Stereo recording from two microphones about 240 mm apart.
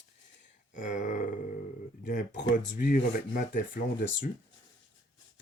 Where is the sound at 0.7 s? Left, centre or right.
Left.